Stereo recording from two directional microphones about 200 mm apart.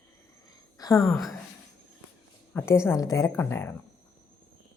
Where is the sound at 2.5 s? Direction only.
15° left (ahead or behind).